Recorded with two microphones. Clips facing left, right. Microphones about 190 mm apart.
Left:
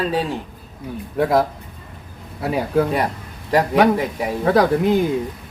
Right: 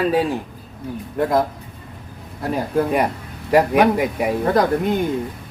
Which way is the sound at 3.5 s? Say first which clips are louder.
Right 1 dB; 10° right (ahead or behind).